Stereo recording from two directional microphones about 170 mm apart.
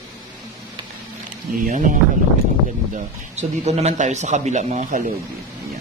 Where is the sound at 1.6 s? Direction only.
50° right (ahead or behind).